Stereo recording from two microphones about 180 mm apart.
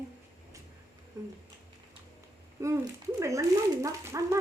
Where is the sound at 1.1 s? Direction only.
20° right (ahead or behind).